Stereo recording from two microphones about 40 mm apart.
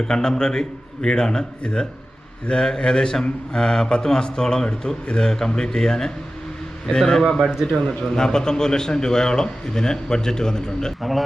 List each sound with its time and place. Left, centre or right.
0.0 s a man's voice: centre
7.7 s a man's voice: centre